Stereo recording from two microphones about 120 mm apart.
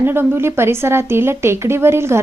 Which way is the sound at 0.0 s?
20° right (ahead or behind).